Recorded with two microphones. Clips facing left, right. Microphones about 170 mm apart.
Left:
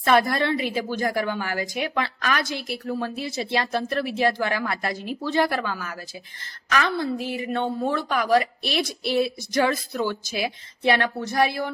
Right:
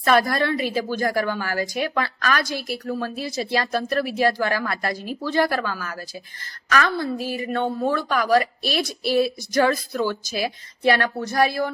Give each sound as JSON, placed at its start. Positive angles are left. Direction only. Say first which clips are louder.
{"t": 0.1, "sound": "a woman's voice", "louder": "right 1 dB", "side_deg": 20}